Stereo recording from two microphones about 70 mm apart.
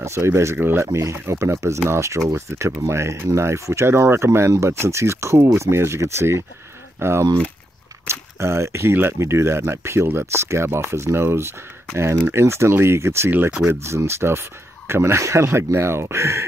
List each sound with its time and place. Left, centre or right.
0.0 s speech: right
0.6 s speech: right